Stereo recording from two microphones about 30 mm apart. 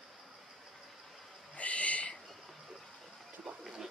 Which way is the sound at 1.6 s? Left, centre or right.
Left.